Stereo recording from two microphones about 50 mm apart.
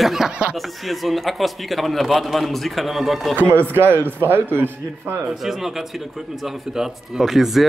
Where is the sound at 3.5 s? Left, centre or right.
Right.